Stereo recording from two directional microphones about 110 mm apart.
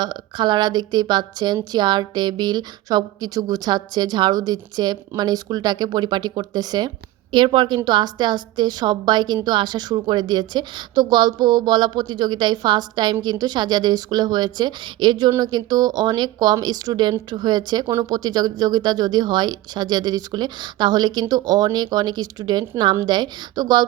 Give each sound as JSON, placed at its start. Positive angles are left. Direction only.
{"t": 0.0, "sound": "a woman's voice", "side_deg": -45}